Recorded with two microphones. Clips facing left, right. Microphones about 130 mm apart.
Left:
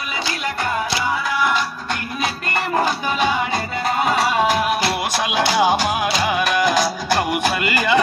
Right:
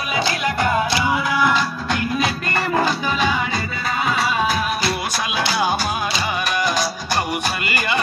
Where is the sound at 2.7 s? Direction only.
50° left (ahead or behind); by 5.3 s 70° left (ahead or behind).